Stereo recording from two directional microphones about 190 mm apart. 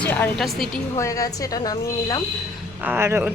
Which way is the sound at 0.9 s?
15° left (ahead or behind).